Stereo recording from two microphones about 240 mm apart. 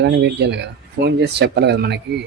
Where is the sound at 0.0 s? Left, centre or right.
Right.